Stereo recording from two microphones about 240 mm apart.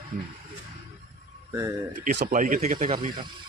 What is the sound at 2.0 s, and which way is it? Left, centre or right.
Speech, right.